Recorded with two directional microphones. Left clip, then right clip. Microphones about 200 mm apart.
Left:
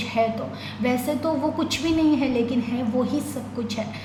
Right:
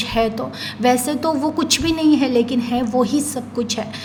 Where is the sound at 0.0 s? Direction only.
45° right (ahead or behind).